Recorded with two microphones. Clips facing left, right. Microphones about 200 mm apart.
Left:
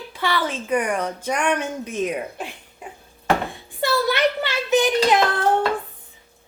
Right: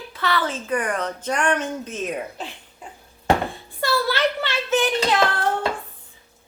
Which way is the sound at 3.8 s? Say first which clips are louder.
Left 2 dB; 15° left (ahead or behind).